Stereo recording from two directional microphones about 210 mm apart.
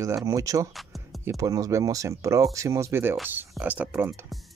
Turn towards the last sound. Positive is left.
turn(degrees=-10)  # may be behind; listen again after turning